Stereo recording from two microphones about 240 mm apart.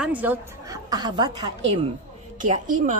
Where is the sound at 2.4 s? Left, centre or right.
Right.